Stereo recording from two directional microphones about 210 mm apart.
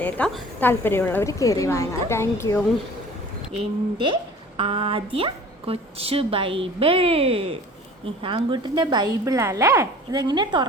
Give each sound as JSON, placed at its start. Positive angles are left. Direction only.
{"t": 0.0, "sound": "a woman's voice", "side_deg": 5}
{"t": 3.9, "sound": "a woman's voice", "side_deg": -25}